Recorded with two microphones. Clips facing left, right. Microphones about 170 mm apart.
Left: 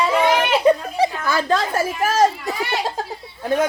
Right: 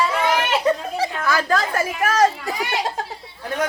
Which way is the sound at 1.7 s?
30° left (ahead or behind).